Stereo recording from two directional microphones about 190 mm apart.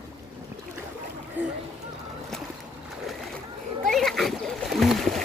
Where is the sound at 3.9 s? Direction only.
Centre (ahead or behind).